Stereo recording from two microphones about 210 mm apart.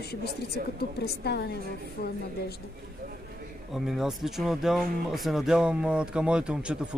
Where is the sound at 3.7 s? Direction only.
Centre (ahead or behind).